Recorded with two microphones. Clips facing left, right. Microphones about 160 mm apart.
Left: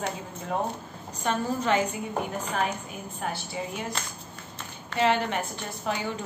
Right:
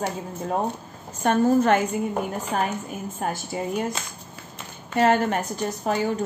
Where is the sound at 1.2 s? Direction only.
55° right (ahead or behind).